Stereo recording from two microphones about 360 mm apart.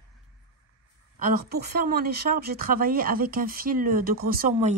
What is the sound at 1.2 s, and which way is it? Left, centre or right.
Speech, right.